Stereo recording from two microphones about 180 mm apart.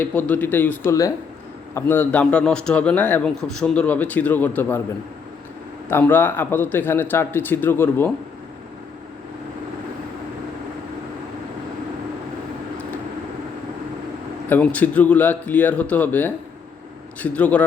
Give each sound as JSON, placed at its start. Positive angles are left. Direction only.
{"t": 0.0, "sound": "a man's voice", "side_deg": 10}
{"t": 5.9, "sound": "a man's voice", "side_deg": 10}
{"t": 14.5, "sound": "a man's voice", "side_deg": 10}